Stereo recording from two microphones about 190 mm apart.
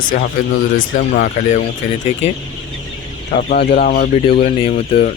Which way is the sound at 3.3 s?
50° left (ahead or behind).